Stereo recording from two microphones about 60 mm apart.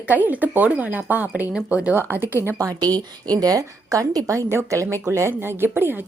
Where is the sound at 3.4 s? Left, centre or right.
Right.